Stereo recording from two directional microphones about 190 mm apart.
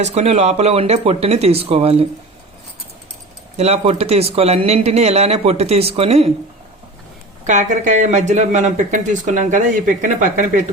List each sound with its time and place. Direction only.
0.0 s speech: 35° right (ahead or behind)
3.6 s speech: 35° right (ahead or behind)
7.4 s speech: 40° right (ahead or behind)